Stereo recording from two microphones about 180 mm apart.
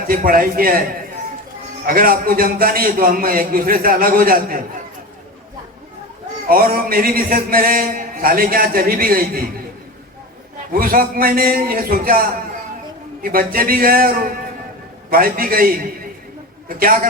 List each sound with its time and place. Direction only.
0.1 s a man's voice: 50° right (ahead or behind)
1.9 s a man's voice: 55° right (ahead or behind)
6.5 s a man's voice: 55° right (ahead or behind)
10.8 s a man's voice: 55° right (ahead or behind)
13.2 s a man's voice: 50° right (ahead or behind)